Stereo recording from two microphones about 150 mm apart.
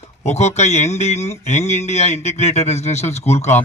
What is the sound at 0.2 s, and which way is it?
Speech, 50° left (ahead or behind).